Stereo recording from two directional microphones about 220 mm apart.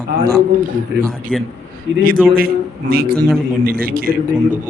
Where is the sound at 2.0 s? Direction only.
40° right (ahead or behind).